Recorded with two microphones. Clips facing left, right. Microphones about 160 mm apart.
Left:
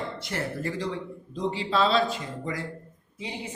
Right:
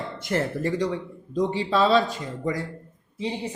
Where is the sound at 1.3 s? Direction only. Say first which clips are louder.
Right 4 dB; 40° right (ahead or behind).